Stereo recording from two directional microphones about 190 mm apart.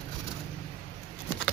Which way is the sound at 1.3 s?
5° left (ahead or behind).